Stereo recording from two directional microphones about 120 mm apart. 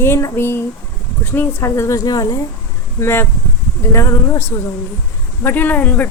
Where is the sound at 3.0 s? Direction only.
20° left (ahead or behind).